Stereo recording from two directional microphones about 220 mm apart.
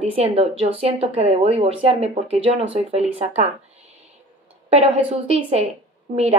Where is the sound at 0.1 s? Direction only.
25° right (ahead or behind).